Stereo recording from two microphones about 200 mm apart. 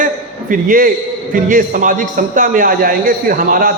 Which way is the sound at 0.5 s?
45° right (ahead or behind).